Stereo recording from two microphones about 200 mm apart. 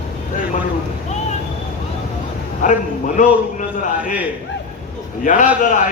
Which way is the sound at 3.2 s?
40° left (ahead or behind).